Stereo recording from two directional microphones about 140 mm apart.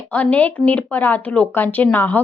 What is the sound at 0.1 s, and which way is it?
A woman's voice, 10° left (ahead or behind).